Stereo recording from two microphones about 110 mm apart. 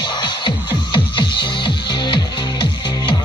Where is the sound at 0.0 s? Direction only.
45° left (ahead or behind).